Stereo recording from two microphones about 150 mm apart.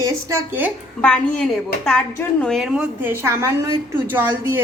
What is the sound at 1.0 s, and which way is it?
Speech, 5° left (ahead or behind).